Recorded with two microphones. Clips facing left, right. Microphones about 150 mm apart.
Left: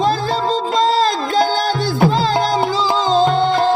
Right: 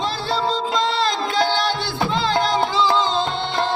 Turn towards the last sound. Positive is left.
turn(degrees=40)  # may be behind; listen again after turning